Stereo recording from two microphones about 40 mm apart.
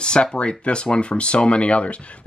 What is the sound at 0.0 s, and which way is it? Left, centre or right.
Speech, left.